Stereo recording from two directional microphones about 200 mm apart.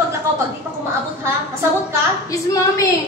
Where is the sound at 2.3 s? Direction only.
15° left (ahead or behind).